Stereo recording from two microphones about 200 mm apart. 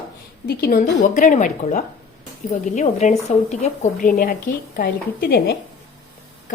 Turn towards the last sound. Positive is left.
turn(degrees=55)  # may be behind; listen again after turning